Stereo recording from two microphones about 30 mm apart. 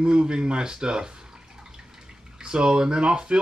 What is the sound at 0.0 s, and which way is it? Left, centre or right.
Speech, right.